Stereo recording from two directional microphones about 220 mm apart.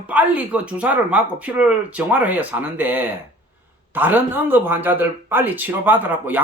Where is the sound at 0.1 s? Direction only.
5° right (ahead or behind).